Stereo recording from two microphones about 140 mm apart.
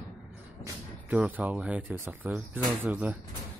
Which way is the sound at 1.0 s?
10° right (ahead or behind).